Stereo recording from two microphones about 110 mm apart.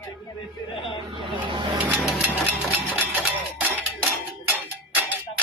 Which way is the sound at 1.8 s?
15° right (ahead or behind).